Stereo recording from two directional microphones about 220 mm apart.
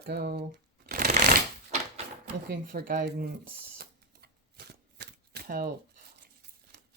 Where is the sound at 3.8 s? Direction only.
45° right (ahead or behind).